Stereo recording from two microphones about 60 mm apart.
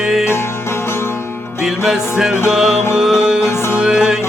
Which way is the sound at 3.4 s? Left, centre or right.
Left.